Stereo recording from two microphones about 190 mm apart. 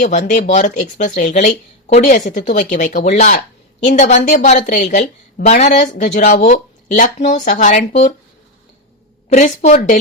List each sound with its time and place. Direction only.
0.0 s speech: 40° left (ahead or behind)
9.3 s speech: 40° left (ahead or behind)